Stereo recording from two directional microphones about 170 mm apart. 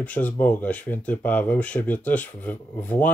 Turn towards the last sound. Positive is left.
turn(degrees=10)  # may be behind; listen again after turning